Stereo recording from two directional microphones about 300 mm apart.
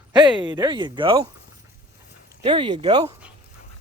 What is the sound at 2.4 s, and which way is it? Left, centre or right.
Speech, centre.